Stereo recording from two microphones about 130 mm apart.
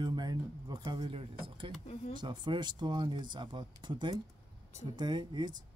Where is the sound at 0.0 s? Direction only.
35° right (ahead or behind).